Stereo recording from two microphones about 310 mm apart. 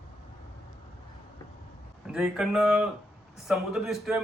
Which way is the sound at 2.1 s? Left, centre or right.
Centre.